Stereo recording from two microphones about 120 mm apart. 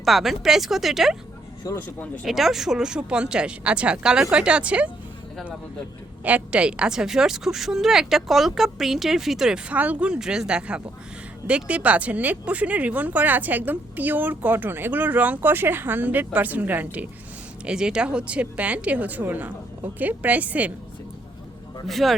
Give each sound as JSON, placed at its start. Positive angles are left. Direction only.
{"t": 0.0, "sound": "a woman's voice", "side_deg": 0}
{"t": 1.7, "sound": "speech", "side_deg": 30}
{"t": 2.2, "sound": "speech", "side_deg": 0}
{"t": 6.2, "sound": "a woman's voice", "side_deg": -10}
{"t": 21.8, "sound": "a woman's voice", "side_deg": 0}